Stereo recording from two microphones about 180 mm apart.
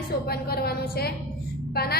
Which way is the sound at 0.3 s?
60° left (ahead or behind).